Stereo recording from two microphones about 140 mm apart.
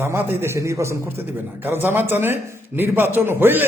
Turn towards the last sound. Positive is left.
turn(degrees=-15)  # may be behind; listen again after turning